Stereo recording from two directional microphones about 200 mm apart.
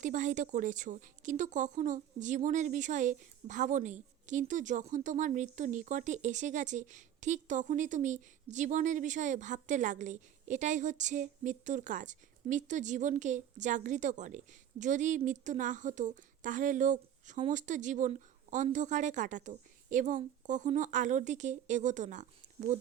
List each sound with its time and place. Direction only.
0.0 s speech: 40° right (ahead or behind)